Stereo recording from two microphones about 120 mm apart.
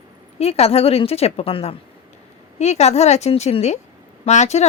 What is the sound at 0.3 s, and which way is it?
Speech, 55° left (ahead or behind).